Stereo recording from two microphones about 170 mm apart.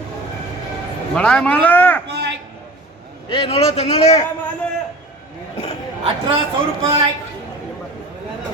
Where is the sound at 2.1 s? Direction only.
80° right.